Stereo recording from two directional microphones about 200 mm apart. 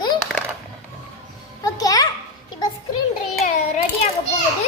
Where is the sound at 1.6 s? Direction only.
20° left (ahead or behind).